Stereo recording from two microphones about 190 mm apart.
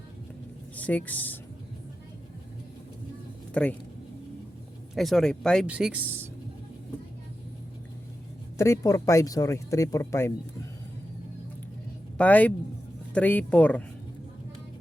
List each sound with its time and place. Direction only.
0.8 s speech: 10° left (ahead or behind)
3.5 s speech: 5° left (ahead or behind)
4.9 s speech: centre (ahead or behind)
8.5 s speech: 15° left (ahead or behind)
12.1 s speech: 10° left (ahead or behind)